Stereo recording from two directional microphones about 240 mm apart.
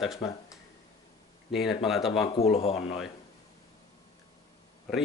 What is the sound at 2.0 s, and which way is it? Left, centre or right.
Speech, left.